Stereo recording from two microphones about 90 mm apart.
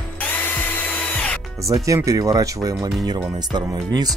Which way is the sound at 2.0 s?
40° right (ahead or behind).